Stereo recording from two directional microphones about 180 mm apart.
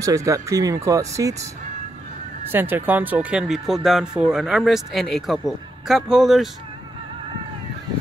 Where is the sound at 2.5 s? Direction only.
10° right (ahead or behind).